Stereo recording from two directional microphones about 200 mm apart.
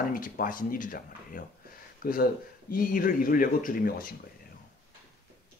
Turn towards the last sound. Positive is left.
turn(degrees=45)  # may be behind; listen again after turning